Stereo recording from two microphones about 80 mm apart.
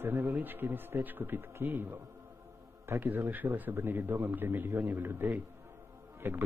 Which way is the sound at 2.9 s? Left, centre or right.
Right.